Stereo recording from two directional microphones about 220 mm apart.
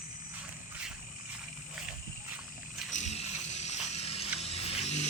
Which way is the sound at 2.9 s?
30° left (ahead or behind).